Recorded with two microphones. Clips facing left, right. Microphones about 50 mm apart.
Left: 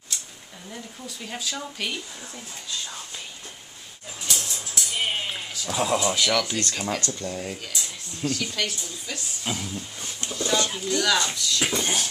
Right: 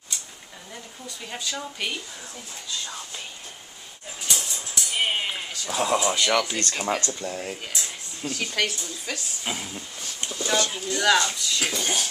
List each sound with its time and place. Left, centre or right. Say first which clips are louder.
1.0 s speech: even; centre
4.2 s dog: even; centre
4.9 s a sound: right 2 dB; centre
5.5 s speech: even; centre
7.2 s speech: even; centre
8.5 s speech: right 3 dB; right
9.4 s speech: left 1 dB; centre
10.2 s a sound: left 1 dB; centre
11.0 s speech: right 3 dB; right
11.6 s speech: left 2 dB; centre